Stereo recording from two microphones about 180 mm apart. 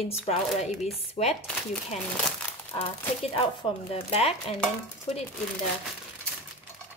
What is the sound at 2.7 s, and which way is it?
Speech, 30° left (ahead or behind).